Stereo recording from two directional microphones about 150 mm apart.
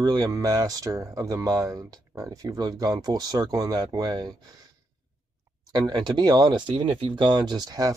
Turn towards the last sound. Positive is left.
turn(degrees=-25)  # may be behind; listen again after turning